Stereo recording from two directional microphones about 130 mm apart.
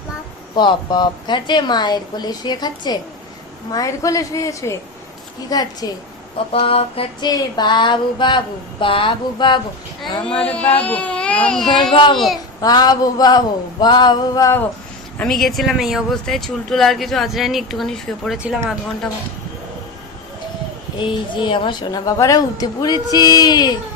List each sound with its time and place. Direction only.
0.5 s a woman's voice: 35° left (ahead or behind)
6.5 s a sound: 50° left (ahead or behind)
7.3 s a woman's voice: 30° left (ahead or behind)
10.1 s a sound: 40° left (ahead or behind)
10.4 s speech: 10° left (ahead or behind)
11.6 s a woman's voice: 35° left (ahead or behind)
12.1 s speech: centre (ahead or behind)
12.6 s a woman's voice: 30° left (ahead or behind)
15.2 s speech: centre (ahead or behind)
21.0 s a woman's voice: 40° left (ahead or behind)